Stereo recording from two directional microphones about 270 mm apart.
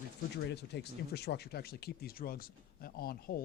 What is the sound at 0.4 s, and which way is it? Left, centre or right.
Speech, left.